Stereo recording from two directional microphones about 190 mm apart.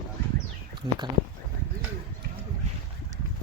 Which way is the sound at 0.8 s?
20° right (ahead or behind).